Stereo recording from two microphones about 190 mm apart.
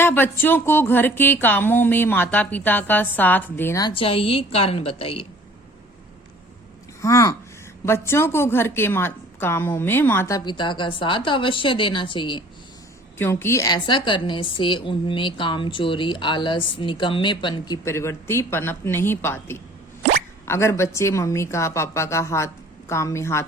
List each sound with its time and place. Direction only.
0.0 s speech: 10° left (ahead or behind); by 5.2 s 30° left (ahead or behind)
7.0 s speech: 15° left (ahead or behind)
13.1 s a woman's voice: 10° left (ahead or behind)